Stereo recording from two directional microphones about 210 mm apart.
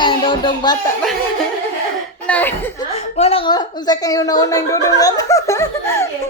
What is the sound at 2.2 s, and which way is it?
Speech, 10° left (ahead or behind).